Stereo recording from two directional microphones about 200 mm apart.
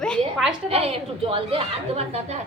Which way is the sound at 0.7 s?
30° right (ahead or behind).